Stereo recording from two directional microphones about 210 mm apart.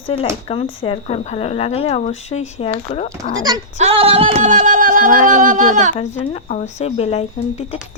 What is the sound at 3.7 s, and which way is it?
Speech, 30° right (ahead or behind).